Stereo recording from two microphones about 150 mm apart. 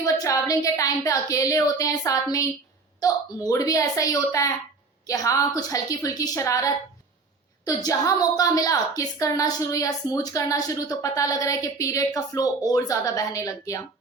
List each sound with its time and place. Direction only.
0.0 s a woman's voice: 25° left (ahead or behind)